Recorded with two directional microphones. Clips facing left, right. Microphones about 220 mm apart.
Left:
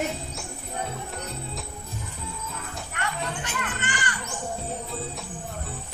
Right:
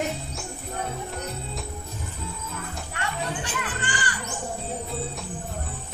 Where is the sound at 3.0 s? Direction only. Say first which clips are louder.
Right 1 dB; 30° right (ahead or behind).